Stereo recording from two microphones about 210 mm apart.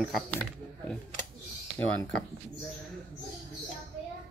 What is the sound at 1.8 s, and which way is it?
Speech, 15° left (ahead or behind).